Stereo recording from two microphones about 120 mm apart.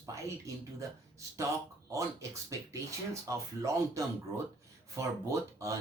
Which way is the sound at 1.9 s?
25° right (ahead or behind).